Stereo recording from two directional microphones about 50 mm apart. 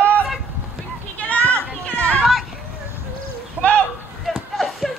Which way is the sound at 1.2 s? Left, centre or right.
Left.